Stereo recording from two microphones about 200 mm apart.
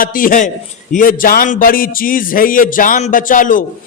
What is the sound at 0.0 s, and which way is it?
A man's voice, 45° left (ahead or behind).